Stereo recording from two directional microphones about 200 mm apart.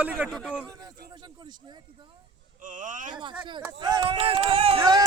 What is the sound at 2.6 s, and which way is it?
Speech, 40° right (ahead or behind).